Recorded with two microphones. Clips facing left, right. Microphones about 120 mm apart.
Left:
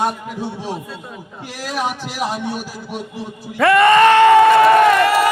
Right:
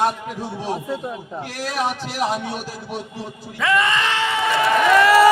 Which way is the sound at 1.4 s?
5° left (ahead or behind).